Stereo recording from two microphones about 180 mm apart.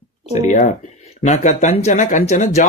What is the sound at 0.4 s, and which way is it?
Speech, 40° left (ahead or behind).